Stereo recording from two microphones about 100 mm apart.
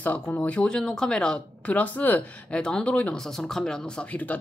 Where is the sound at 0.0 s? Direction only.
15° left (ahead or behind).